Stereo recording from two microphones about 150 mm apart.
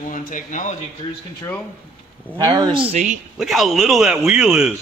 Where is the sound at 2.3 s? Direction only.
30° right (ahead or behind).